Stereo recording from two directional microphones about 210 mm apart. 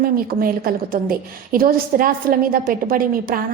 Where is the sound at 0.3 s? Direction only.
45° right (ahead or behind).